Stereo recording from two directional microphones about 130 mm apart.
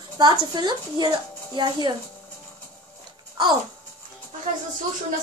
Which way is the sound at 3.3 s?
35° right (ahead or behind).